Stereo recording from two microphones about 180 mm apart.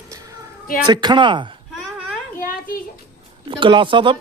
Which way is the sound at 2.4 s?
50° left (ahead or behind).